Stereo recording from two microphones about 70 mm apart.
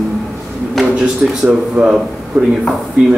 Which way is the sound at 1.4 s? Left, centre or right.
Centre.